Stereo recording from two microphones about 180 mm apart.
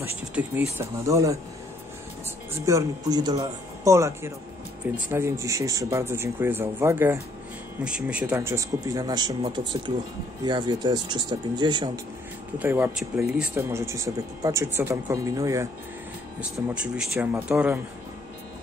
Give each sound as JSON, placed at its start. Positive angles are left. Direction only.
{"t": 0.3, "sound": "speech", "side_deg": -10}
{"t": 2.6, "sound": "speech", "side_deg": -20}
{"t": 8.4, "sound": "speech", "side_deg": -15}
{"t": 12.5, "sound": "speech", "side_deg": -10}
{"t": 16.3, "sound": "speech", "side_deg": -5}